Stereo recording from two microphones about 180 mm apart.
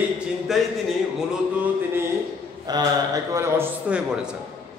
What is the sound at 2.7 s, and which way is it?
A man's voice, 20° right (ahead or behind).